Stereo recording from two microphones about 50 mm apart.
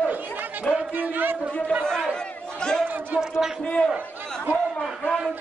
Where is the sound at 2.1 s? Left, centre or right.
Centre.